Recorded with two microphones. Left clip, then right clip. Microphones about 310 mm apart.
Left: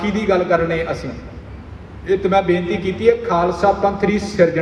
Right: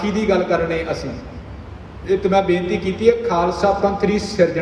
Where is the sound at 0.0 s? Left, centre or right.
Left.